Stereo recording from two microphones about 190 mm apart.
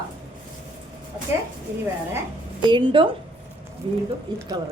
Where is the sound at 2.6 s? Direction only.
25° right (ahead or behind).